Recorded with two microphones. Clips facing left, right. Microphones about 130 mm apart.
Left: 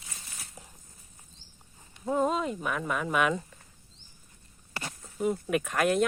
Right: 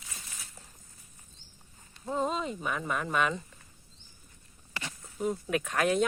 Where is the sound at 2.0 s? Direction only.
5° left (ahead or behind).